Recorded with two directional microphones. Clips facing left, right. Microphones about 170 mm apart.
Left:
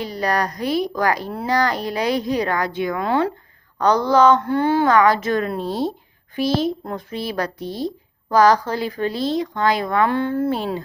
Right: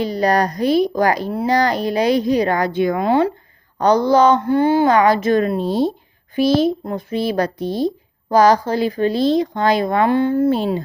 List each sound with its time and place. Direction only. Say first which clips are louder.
0.0 s a woman's voice: right 5 dB; 25° right (ahead or behind)
4.4 s a sound: right 4 dB; 5° right (ahead or behind)
4.9 s a woman's voice: right 3 dB; 20° right (ahead or behind)